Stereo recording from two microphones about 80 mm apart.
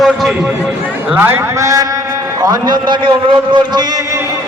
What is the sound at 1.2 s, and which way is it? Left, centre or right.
Speech, right.